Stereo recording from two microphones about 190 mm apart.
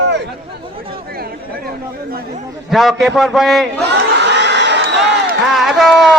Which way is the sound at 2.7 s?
Centre (ahead or behind).